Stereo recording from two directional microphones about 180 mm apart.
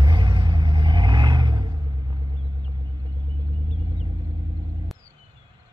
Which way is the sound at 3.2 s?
25° right (ahead or behind).